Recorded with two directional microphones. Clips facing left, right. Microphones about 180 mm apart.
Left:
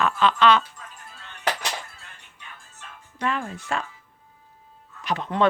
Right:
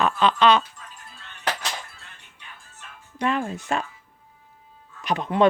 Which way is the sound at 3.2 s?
20° right (ahead or behind).